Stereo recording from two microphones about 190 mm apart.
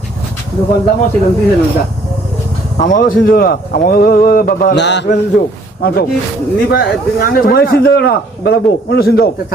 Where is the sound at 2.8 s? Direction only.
40° left (ahead or behind).